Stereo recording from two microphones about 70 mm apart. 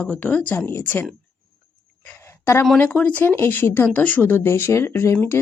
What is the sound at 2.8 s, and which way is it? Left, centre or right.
Speech, left.